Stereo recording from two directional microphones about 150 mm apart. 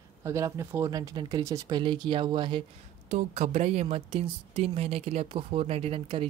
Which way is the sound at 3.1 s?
45° right (ahead or behind).